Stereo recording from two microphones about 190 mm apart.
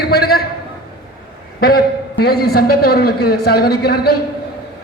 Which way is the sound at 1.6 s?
55° left (ahead or behind).